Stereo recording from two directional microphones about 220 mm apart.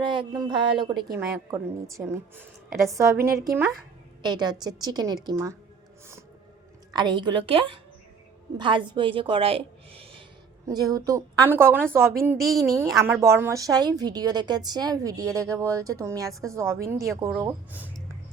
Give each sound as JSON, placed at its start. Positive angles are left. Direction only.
{"t": 0.0, "sound": "a woman's voice", "side_deg": -20}
{"t": 6.9, "sound": "a woman's voice", "side_deg": -20}